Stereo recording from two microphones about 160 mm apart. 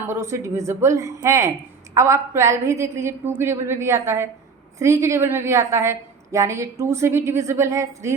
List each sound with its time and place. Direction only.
0.1 s a woman's voice: 15° right (ahead or behind)